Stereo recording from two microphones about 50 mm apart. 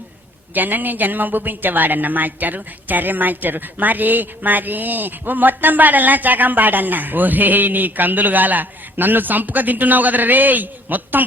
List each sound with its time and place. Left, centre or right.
0.5 s speech: right